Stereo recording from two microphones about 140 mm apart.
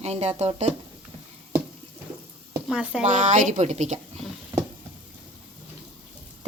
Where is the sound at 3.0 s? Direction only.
65° right (ahead or behind).